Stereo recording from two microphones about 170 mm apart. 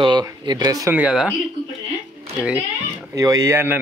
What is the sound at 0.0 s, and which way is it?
Speech, 25° right (ahead or behind).